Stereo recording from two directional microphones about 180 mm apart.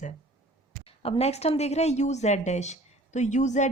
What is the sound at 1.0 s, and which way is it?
Speech, 35° left (ahead or behind).